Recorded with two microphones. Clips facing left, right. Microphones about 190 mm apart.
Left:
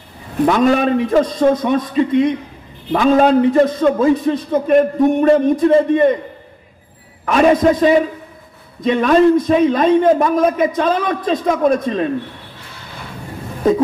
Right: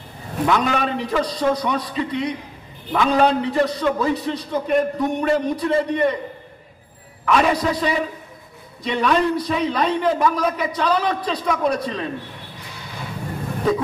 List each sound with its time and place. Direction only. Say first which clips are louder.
0.5 s a man's voice: left 7 dB; 45° left (ahead or behind)
7.2 s a man's voice: left 7 dB; 45° left (ahead or behind)